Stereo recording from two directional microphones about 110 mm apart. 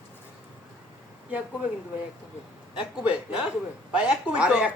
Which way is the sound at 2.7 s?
10° right (ahead or behind).